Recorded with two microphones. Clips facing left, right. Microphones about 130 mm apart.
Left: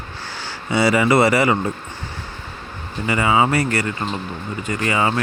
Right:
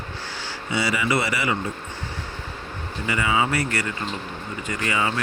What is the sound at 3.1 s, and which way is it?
Speech, 35° left (ahead or behind).